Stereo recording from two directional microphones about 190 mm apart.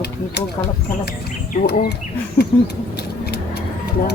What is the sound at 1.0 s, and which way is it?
Insect, 45° left (ahead or behind).